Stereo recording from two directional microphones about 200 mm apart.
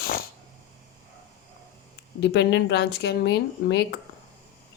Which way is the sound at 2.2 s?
60° left (ahead or behind).